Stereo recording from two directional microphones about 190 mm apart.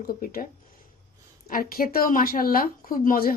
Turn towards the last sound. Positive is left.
turn(degrees=50)  # may be behind; listen again after turning